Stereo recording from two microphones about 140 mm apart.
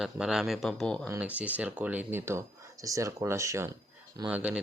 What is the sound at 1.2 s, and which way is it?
Speech, 10° right (ahead or behind).